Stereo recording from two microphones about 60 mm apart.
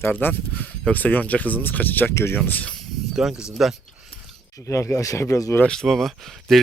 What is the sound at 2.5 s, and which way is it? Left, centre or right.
Speech, left.